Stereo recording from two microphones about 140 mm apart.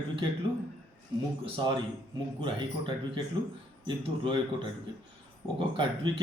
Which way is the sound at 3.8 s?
35° right (ahead or behind).